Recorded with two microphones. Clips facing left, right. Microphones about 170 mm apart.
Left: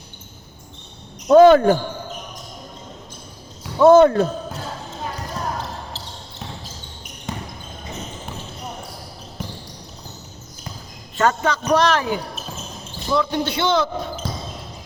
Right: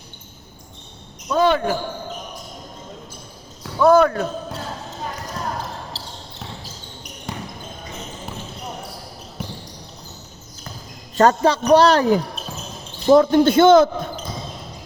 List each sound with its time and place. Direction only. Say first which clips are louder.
1.3 s speech: left 8 dB; 45° left (ahead or behind)
3.6 s speech: left 3 dB; 25° left (ahead or behind)
6.0 s basketball bounce: even; 35° right (ahead or behind)
7.3 s basketball bounce: left 1 dB; centre (ahead or behind)
11.2 s a man's voice: right 4 dB; 35° right (ahead or behind)